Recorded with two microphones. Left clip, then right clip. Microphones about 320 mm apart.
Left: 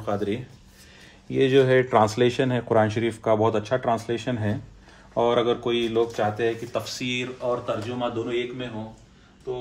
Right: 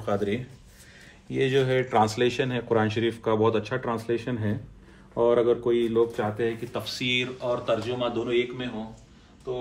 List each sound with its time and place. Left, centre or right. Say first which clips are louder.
0.0 s a man's voice: even; centre
1.3 s speech: left 5 dB; left; by 8.6 s centre